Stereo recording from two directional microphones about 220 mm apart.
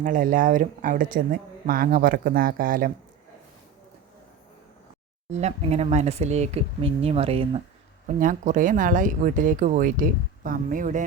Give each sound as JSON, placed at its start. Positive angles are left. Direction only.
{"t": 0.0, "sound": "speech", "side_deg": -35}
{"t": 5.3, "sound": "speech", "side_deg": -30}